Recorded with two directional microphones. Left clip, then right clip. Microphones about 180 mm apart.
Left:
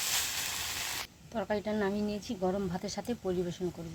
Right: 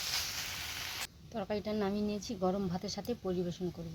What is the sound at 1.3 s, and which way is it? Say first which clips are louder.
Speech: left 4 dB; 5° right (ahead or behind).